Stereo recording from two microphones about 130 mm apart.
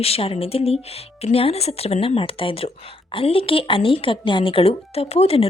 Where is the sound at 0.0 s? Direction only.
50° left (ahead or behind).